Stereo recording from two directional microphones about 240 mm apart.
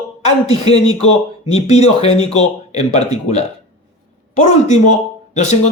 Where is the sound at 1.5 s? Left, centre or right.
Left.